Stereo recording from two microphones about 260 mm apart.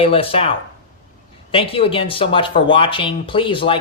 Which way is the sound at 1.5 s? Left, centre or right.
Left.